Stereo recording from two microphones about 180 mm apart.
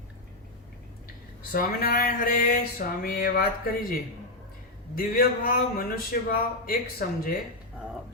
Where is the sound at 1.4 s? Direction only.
55° left (ahead or behind).